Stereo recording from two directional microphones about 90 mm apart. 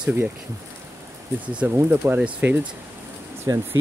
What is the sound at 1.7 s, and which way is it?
Speech, 25° right (ahead or behind).